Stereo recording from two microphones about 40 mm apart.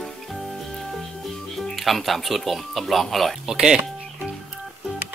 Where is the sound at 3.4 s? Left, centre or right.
Centre.